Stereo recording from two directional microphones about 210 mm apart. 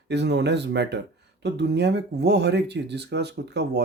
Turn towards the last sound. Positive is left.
turn(degrees=-55)  # may be behind; listen again after turning